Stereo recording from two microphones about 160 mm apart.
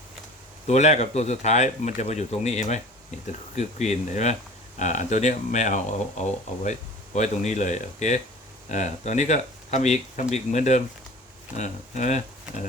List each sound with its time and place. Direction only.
0.7 s speech: 45° left (ahead or behind)